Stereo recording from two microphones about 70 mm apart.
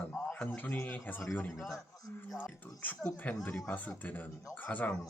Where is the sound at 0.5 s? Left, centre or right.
Left.